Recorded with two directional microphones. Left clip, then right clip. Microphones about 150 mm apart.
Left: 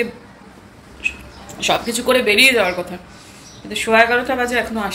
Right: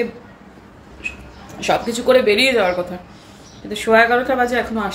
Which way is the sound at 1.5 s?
15° right (ahead or behind).